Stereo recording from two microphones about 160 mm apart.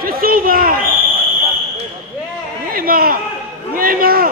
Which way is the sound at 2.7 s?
65° right (ahead or behind).